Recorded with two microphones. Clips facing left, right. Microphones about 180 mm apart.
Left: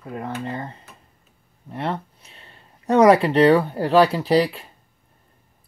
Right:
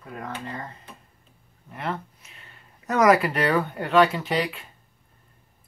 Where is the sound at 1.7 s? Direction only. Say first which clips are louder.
Left 4 dB; 30° left (ahead or behind).